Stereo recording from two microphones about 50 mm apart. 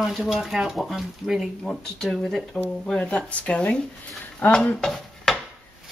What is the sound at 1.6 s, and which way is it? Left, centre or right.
Speech, centre.